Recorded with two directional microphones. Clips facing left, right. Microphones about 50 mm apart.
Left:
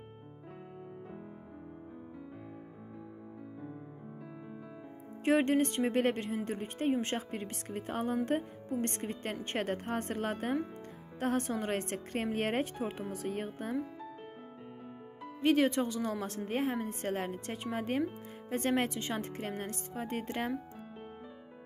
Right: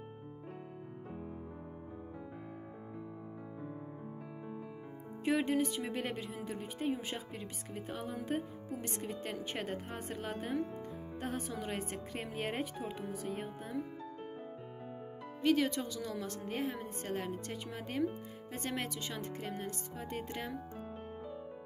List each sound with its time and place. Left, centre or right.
5.2 s speech: left
15.4 s a woman's voice: left